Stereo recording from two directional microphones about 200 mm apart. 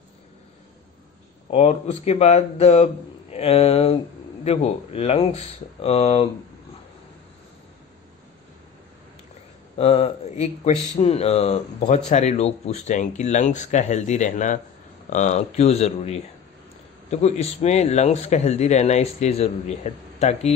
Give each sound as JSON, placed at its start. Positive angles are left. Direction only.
{"t": 1.5, "sound": "speech", "side_deg": 30}
{"t": 9.8, "sound": "speech", "side_deg": 30}